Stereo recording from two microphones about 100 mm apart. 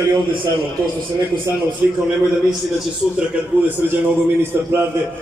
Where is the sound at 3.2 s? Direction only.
15° right (ahead or behind).